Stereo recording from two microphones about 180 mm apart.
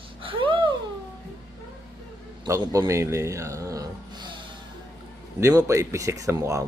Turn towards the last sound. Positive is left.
turn(degrees=-15)  # may be behind; listen again after turning